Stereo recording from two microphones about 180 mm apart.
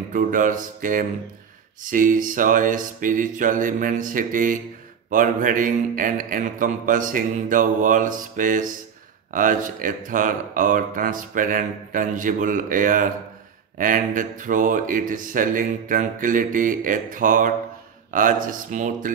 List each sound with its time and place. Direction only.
0.1 s speech: 45° right (ahead or behind)